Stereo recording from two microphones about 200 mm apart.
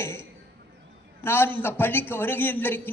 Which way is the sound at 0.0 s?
15° left (ahead or behind).